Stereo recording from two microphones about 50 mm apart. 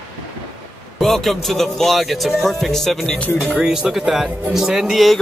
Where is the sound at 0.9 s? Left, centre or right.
Centre.